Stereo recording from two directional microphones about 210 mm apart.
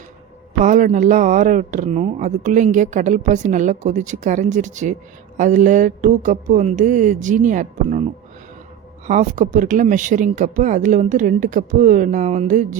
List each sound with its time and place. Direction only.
0.6 s speech: 35° right (ahead or behind)
9.0 s speech: 35° right (ahead or behind)